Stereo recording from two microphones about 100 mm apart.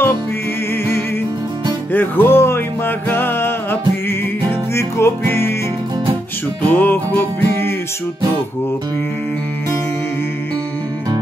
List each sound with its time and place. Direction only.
1.9 s music: 20° left (ahead or behind)
6.7 s music: 20° left (ahead or behind)